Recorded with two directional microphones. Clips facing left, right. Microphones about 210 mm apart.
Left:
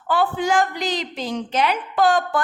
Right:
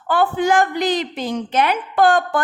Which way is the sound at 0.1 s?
55° right (ahead or behind).